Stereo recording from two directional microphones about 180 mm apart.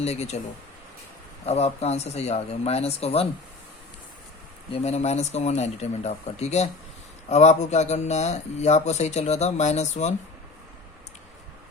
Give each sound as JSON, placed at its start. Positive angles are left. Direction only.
{"t": 0.0, "sound": "speech", "side_deg": 35}
{"t": 1.5, "sound": "speech", "side_deg": 35}
{"t": 4.7, "sound": "speech", "side_deg": 35}